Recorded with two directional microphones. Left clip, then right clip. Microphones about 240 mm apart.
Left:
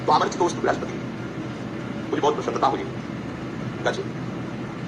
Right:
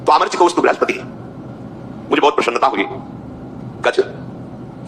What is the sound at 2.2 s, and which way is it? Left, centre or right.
Speech, right.